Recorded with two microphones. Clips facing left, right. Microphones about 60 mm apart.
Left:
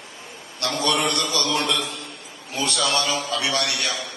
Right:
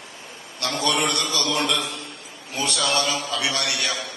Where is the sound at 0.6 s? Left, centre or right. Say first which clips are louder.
Left 1 dB; right.